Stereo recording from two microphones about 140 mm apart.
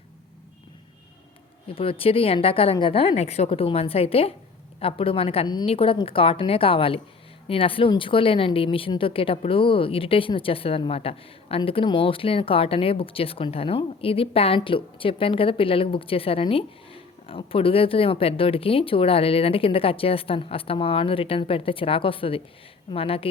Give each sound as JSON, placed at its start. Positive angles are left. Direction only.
{"t": 1.6, "sound": "a woman's voice", "side_deg": 40}